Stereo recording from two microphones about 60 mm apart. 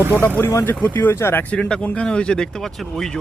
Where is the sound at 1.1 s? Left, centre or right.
Left.